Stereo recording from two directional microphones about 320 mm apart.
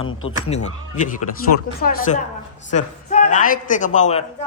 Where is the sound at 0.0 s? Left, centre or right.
Left.